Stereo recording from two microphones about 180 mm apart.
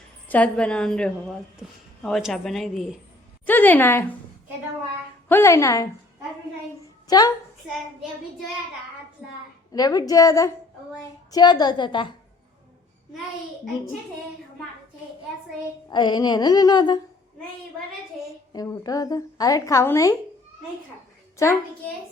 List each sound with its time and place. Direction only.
0.3 s a woman's voice: 10° left (ahead or behind)
5.3 s a woman's voice: 15° left (ahead or behind)
7.1 s a woman's voice: 20° left (ahead or behind)
9.7 s a woman's voice: 20° left (ahead or behind)
15.9 s a woman's voice: 25° left (ahead or behind)
18.5 s a woman's voice: 20° left (ahead or behind)
21.3 s a woman's voice: 15° left (ahead or behind)